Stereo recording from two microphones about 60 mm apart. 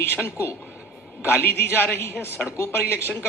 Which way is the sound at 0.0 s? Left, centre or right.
Left.